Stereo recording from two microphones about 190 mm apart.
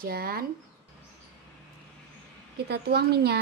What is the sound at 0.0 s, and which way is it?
Speech, 55° right (ahead or behind).